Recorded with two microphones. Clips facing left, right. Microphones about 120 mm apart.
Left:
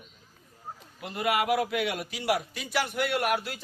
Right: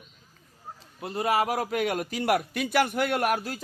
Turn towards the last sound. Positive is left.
turn(degrees=-40)  # may be behind; listen again after turning